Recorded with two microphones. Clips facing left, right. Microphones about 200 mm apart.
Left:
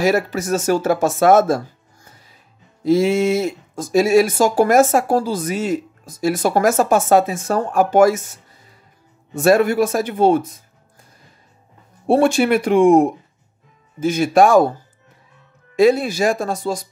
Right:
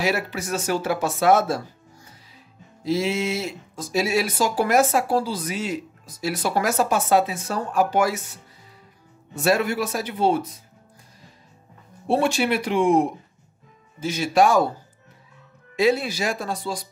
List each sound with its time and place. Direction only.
0.0 s speech: 45° left (ahead or behind)
2.8 s speech: 50° left (ahead or behind)
12.1 s speech: 50° left (ahead or behind)
15.7 s speech: 50° left (ahead or behind)